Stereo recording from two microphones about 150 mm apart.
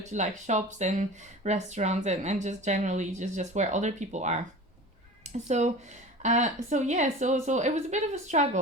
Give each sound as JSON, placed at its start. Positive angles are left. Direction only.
{"t": 0.0, "sound": "speech", "side_deg": -50}